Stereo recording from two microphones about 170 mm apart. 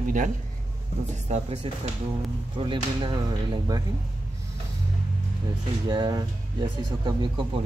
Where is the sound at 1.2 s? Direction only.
40° right (ahead or behind).